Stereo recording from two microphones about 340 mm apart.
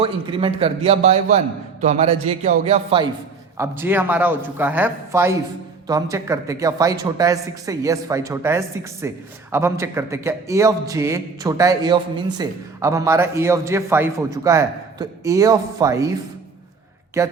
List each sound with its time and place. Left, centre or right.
0.0 s speech: centre
17.2 s speech: centre